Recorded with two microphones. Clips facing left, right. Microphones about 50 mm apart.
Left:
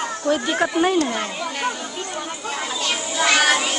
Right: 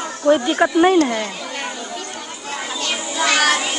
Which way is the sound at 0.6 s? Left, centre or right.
Centre.